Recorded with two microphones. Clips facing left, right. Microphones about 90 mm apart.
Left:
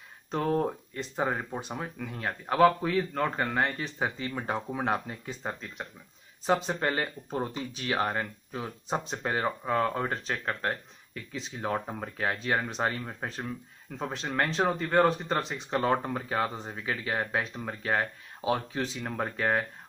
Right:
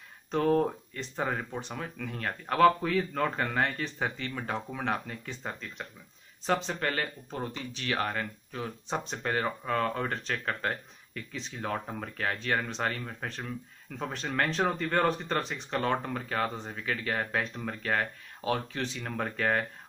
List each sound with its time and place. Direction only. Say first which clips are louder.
0.3 s speech: right 2 dB; 5° left (ahead or behind)
4.6 s speech: left 3 dB; 20° left (ahead or behind)
13.9 s speech: left 1 dB; 5° left (ahead or behind)
15.9 s speech: left 3 dB; 20° left (ahead or behind)